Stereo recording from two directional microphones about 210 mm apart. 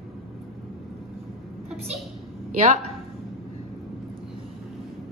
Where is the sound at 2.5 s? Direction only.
35° right (ahead or behind).